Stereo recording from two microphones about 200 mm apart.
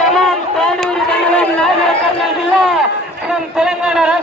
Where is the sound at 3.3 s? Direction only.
5° right (ahead or behind).